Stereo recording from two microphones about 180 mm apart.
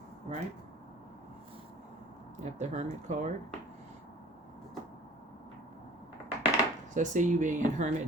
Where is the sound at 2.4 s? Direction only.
40° right (ahead or behind).